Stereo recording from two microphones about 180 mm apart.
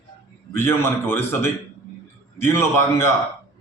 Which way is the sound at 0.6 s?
15° left (ahead or behind).